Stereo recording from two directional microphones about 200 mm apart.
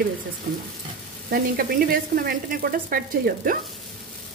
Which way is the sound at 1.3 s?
45° right (ahead or behind).